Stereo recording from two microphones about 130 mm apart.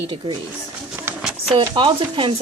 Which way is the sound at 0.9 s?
15° right (ahead or behind).